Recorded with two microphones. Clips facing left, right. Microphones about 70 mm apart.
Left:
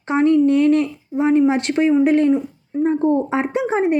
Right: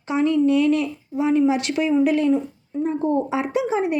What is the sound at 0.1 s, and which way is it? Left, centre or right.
A woman's voice, left.